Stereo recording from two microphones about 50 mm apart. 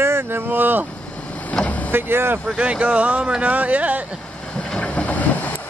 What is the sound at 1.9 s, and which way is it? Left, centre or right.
Speech, right.